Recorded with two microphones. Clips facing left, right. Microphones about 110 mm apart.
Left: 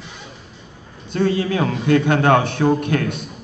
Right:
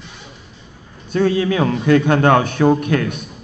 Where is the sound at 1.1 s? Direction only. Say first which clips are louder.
Right 3 dB; 55° right (ahead or behind).